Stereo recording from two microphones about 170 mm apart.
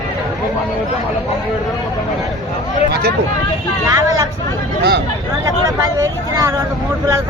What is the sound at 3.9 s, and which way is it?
Vehicle, 20° right (ahead or behind).